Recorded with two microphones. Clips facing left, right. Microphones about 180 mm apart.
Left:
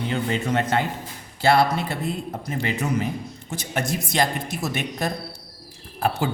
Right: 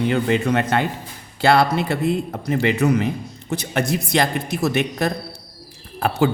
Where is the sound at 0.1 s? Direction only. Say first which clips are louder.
Right 5 dB; 65° right (ahead or behind).